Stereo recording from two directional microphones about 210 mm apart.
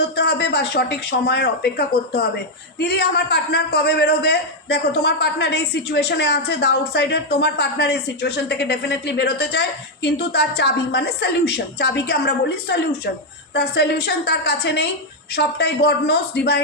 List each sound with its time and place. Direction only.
0.2 s a woman's voice: 50° left (ahead or behind)